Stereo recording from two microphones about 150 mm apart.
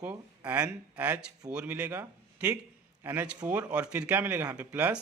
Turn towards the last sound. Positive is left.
turn(degrees=-10)  # may be behind; listen again after turning